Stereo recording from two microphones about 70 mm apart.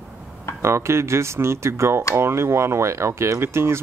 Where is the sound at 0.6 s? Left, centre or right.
Right.